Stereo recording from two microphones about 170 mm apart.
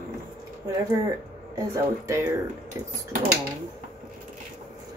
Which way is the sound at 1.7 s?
15° right (ahead or behind).